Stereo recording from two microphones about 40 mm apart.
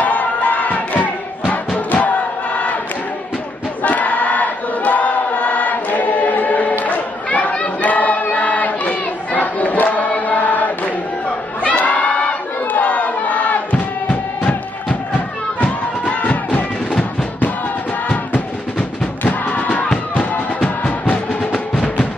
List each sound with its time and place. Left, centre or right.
0.0 s crowd: left
1.9 s choir: left
3.8 s choir: left
6.8 s chatter: left
7.9 s crowd: left
9.9 s choir: left
11.6 s crowd: left
15.6 s music: left
18.0 s music: left